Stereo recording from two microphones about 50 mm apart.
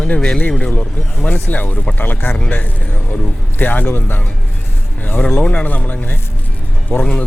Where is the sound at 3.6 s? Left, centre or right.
Left.